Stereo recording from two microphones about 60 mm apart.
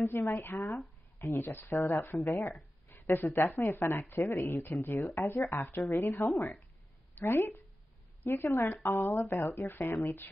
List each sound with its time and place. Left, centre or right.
0.0 s speech: left
2.9 s a sound: left
3.4 s speech: left